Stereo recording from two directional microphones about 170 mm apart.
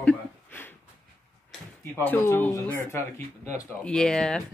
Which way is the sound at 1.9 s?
15° left (ahead or behind).